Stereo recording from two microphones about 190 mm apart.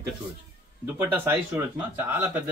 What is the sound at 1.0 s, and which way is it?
Speech, 15° right (ahead or behind).